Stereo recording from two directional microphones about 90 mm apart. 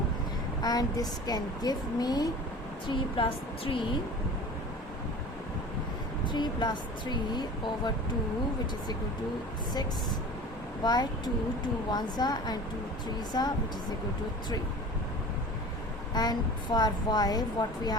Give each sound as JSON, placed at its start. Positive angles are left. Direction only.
{"t": 0.6, "sound": "a woman's voice", "side_deg": 45}
{"t": 2.8, "sound": "speech", "side_deg": 65}
{"t": 6.2, "sound": "speech", "side_deg": 55}
{"t": 10.8, "sound": "a woman's voice", "side_deg": 50}
{"t": 16.1, "sound": "a woman's voice", "side_deg": 50}